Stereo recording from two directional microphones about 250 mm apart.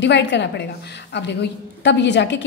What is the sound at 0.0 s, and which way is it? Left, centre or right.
A woman's voice, left.